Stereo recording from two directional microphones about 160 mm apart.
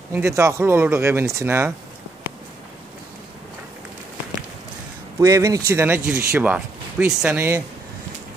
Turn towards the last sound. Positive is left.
turn(degrees=-10)  # may be behind; listen again after turning